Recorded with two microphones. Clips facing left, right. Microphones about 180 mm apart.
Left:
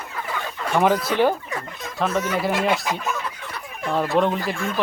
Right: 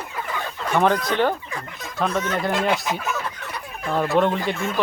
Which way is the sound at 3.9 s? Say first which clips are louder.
Even; centre (ahead or behind).